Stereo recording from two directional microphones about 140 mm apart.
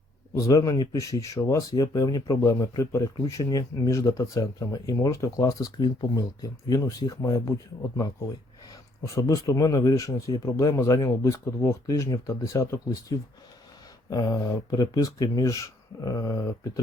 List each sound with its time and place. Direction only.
0.3 s speech: 25° left (ahead or behind)
9.1 s speech: 25° left (ahead or behind)